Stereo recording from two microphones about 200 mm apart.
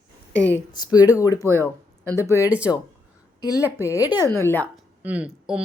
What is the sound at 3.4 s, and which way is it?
Speech, 15° left (ahead or behind).